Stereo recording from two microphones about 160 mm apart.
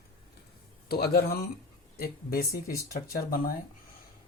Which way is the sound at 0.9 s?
75° left (ahead or behind).